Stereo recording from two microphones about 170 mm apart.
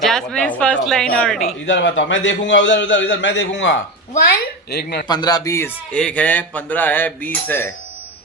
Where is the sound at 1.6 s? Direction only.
90° left.